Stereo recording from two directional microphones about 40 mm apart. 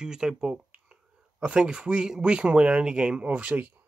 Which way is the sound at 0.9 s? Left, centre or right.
Right.